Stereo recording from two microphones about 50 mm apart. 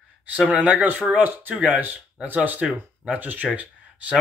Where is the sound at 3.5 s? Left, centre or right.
Right.